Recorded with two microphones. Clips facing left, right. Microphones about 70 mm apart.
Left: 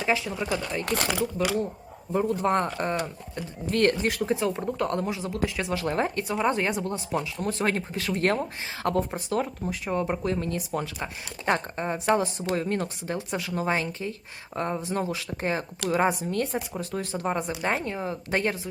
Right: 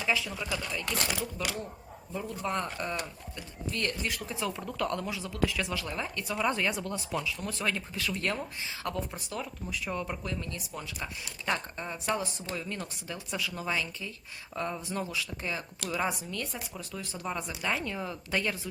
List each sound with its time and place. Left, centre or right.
0.3 s speech: left
2.1 s speech: left
3.7 s speech: left
4.3 s speech: left
5.7 s speech: left
6.2 s speech: left
9.6 s speech: left